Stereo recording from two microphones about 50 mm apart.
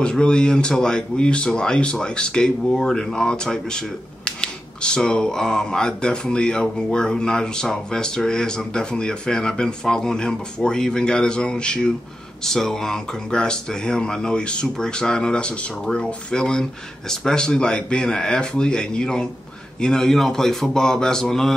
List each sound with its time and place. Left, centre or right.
0.0 s speech: centre
12.4 s speech: centre